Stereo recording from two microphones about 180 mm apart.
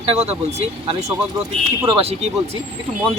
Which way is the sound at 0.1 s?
35° right (ahead or behind).